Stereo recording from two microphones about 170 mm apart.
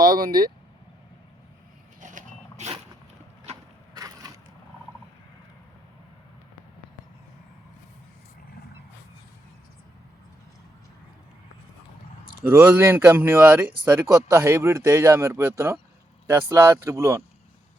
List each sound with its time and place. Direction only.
0.0 s speech: 60° right (ahead or behind)
2.0 s dog: 50° right (ahead or behind)
3.9 s crushing: 20° right (ahead or behind)
12.4 s speech: 15° right (ahead or behind)